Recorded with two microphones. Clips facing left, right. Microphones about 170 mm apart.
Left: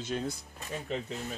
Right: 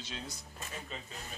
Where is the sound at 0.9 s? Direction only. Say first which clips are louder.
Left 15 dB; 70° left (ahead or behind).